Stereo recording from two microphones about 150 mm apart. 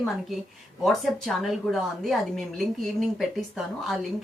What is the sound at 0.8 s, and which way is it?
A woman's voice, centre (ahead or behind).